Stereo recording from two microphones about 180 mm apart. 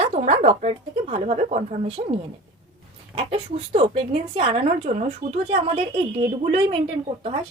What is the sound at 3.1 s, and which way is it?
Speech, 30° right (ahead or behind).